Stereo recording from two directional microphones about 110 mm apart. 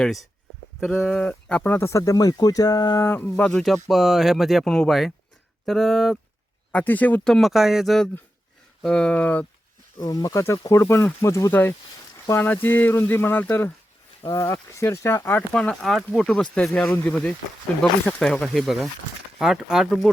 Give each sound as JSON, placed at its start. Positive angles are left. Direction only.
{"t": 0.0, "sound": "speech", "side_deg": 0}
{"t": 1.1, "sound": "speech", "side_deg": 10}
{"t": 3.0, "sound": "speech", "side_deg": 20}
{"t": 3.8, "sound": "speech", "side_deg": 0}
{"t": 6.7, "sound": "speech", "side_deg": 15}
{"t": 10.0, "sound": "speech", "side_deg": 35}
{"t": 14.3, "sound": "speech", "side_deg": 30}
{"t": 15.5, "sound": "speech", "side_deg": 5}